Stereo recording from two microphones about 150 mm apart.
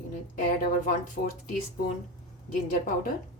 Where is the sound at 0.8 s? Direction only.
60° left (ahead or behind).